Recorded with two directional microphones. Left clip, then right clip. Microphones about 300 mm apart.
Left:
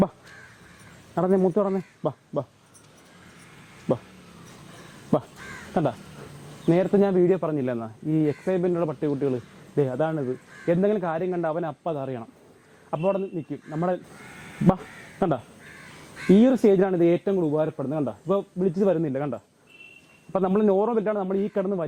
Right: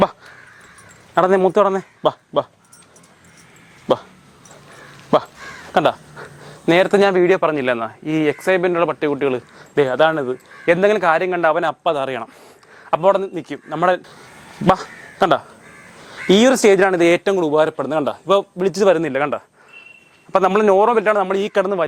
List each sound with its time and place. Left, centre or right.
1.1 s speech: centre
6.7 s speech: centre
15.2 s speech: centre
17.3 s a man's voice: right